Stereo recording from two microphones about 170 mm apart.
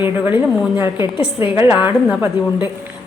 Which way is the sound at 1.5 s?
10° right (ahead or behind).